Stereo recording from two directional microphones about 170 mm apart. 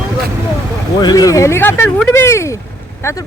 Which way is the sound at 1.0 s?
25° left (ahead or behind).